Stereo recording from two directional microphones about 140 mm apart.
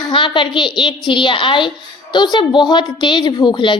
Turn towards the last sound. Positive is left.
turn(degrees=35)  # may be behind; listen again after turning